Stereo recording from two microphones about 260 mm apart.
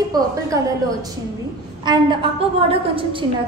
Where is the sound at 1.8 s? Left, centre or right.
Centre.